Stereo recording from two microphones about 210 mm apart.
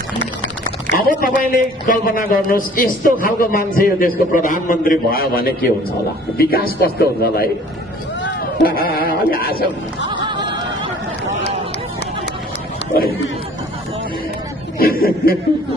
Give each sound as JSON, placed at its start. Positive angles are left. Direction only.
{"t": 0.9, "sound": "a man's voice", "side_deg": 45}
{"t": 14.8, "sound": "a man's voice", "side_deg": 45}